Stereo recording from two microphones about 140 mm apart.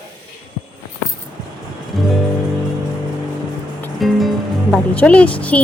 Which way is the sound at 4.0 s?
Centre (ahead or behind).